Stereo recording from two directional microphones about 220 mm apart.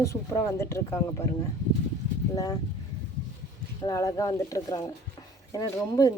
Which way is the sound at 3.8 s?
15° left (ahead or behind).